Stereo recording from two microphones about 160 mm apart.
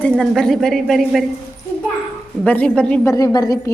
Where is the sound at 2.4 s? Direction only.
10° left (ahead or behind).